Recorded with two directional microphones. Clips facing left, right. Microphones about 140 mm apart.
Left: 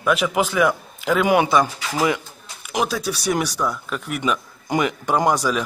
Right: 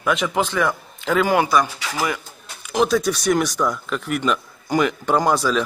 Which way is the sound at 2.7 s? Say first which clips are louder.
Right 5 dB; 5° left (ahead or behind).